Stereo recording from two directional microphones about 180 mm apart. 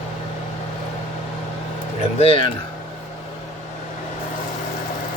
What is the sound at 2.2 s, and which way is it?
Speech, 30° left (ahead or behind).